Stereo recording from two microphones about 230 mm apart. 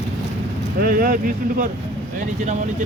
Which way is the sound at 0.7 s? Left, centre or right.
Right.